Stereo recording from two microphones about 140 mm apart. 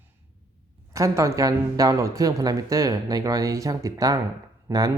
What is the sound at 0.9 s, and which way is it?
Speech, 20° right (ahead or behind).